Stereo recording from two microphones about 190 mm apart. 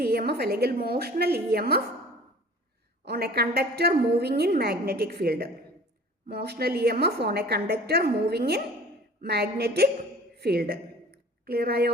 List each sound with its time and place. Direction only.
0.0 s a woman's voice: 55° right (ahead or behind)
3.0 s a woman's voice: 55° right (ahead or behind)